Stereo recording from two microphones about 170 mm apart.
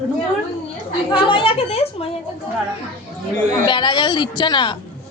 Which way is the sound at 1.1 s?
30° left (ahead or behind).